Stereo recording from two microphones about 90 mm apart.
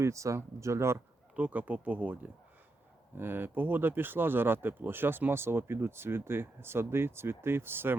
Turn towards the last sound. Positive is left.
turn(degrees=-25)  # may be behind; listen again after turning